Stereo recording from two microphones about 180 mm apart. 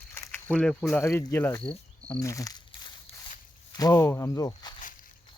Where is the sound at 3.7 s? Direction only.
20° left (ahead or behind).